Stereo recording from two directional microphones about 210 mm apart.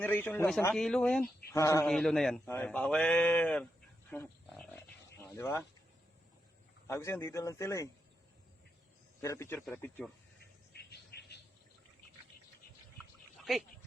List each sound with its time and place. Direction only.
0.0 s speech: 10° left (ahead or behind)
1.5 s speech: 15° left (ahead or behind)
1.9 s a man's voice: centre (ahead or behind)
4.1 s roaring cats: 5° left (ahead or behind)
6.8 s speech: 15° left (ahead or behind)
9.2 s speech: 15° left (ahead or behind)
10.7 s a sound: 50° left (ahead or behind)